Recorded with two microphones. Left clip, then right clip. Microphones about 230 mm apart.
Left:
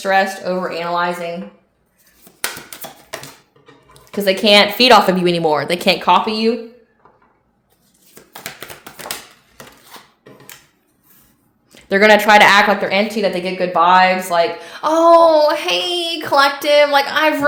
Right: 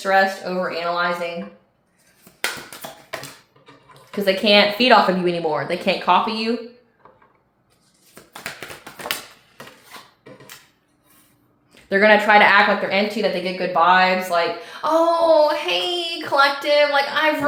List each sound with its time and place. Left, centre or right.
0.0 s a woman's voice: left
4.1 s a woman's voice: left
11.7 s a woman's voice: left